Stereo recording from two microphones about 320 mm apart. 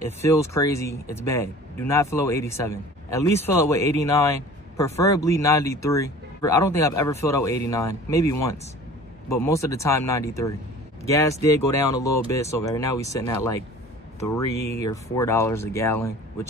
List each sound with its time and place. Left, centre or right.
0.0 s speech: centre